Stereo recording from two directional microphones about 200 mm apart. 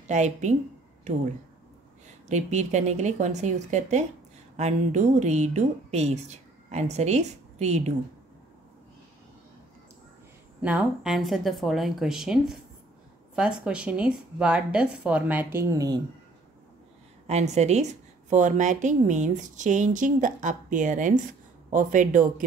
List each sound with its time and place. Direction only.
0.1 s speech: 35° right (ahead or behind)
2.2 s speech: 35° right (ahead or behind)
10.6 s speech: 5° right (ahead or behind)
17.3 s speech: 35° right (ahead or behind)